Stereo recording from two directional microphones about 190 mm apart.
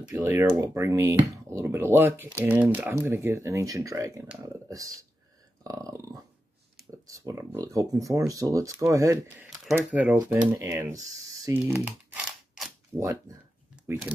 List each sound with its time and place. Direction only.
0.1 s speech: 15° right (ahead or behind)
5.6 s speech: 20° right (ahead or behind)
7.2 s speech: 15° right (ahead or behind)
11.4 s a sound: 10° right (ahead or behind)
12.9 s speech: 15° right (ahead or behind)